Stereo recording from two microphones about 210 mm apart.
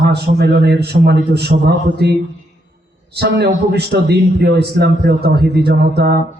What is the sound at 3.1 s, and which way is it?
A man's voice, 50° right (ahead or behind).